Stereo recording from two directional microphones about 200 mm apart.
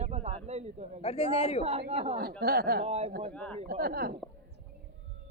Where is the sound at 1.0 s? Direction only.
30° left (ahead or behind).